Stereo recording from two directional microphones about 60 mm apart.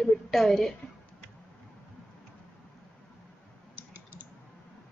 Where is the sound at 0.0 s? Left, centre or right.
Centre.